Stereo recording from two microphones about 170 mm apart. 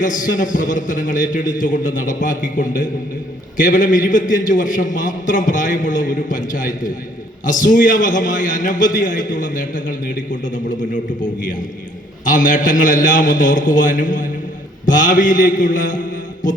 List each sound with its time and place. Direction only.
0.0 s a man's voice: 50° left (ahead or behind)